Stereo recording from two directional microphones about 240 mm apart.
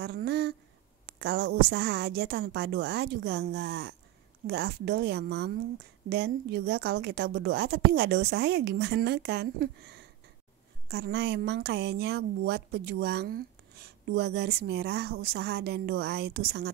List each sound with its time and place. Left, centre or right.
0.0 s a woman's voice: right